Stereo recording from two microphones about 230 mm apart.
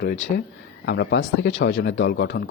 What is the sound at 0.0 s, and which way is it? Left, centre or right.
Speech, left.